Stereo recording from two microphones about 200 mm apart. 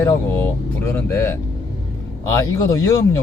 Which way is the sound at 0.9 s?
10° left (ahead or behind).